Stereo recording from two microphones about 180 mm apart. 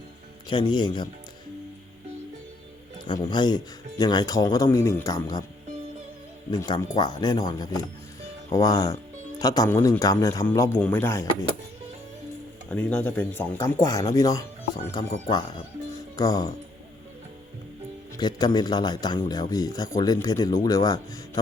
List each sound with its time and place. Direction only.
0.4 s speech: 25° left (ahead or behind)
3.0 s speech: 25° left (ahead or behind)
6.5 s speech: 25° left (ahead or behind)
12.7 s speech: 10° left (ahead or behind); by 15.1 s 25° left (ahead or behind)
16.1 s speech: 20° left (ahead or behind)
18.2 s speech: 25° left (ahead or behind)